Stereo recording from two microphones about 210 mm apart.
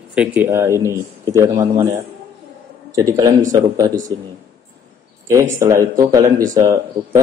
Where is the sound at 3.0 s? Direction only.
15° right (ahead or behind).